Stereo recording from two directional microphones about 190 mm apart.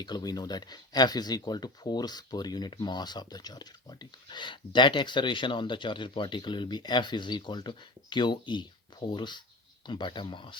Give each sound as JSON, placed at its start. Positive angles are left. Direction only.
{"t": 0.0, "sound": "speech", "side_deg": 20}